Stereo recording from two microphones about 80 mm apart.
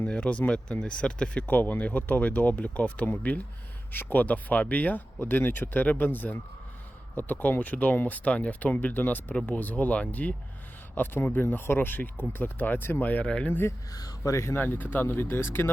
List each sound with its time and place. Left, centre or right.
0.0 s speech: centre
13.5 s speech: left
13.9 s speech: left
14.3 s speech: left